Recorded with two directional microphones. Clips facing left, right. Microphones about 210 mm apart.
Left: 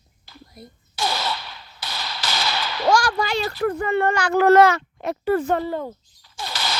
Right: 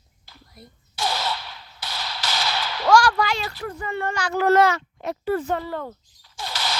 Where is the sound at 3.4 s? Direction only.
60° left (ahead or behind).